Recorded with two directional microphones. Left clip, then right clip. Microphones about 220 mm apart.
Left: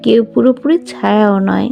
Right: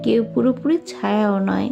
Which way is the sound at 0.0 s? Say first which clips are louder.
Left 8 dB; 40° left (ahead or behind).